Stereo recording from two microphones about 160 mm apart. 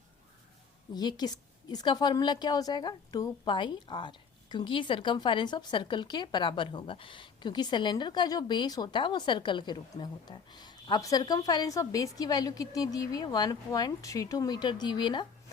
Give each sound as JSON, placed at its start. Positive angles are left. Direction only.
{"t": 0.9, "sound": "a woman's voice", "side_deg": 25}